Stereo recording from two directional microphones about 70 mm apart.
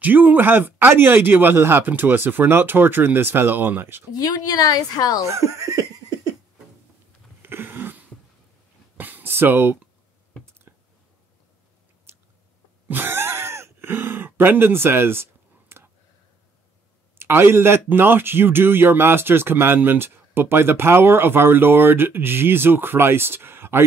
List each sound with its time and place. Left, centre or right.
0.0 s speech: right
4.1 s speech: left
5.2 s laughter: right
7.4 s a sound: right
12.8 s a sound: right
17.2 s speech: right